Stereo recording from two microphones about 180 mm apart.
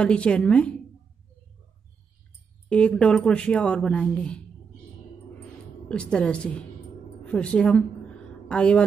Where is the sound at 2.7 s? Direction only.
5° left (ahead or behind).